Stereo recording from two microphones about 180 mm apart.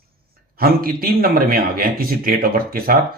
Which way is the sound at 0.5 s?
55° right (ahead or behind).